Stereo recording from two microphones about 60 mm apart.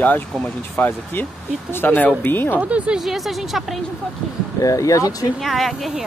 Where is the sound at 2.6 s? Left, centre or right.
Right.